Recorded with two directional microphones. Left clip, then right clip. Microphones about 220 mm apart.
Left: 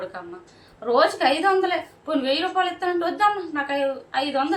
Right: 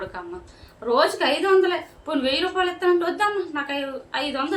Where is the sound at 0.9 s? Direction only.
10° right (ahead or behind).